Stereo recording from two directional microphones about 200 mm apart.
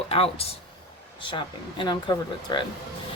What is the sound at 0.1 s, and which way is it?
Speech, 30° left (ahead or behind).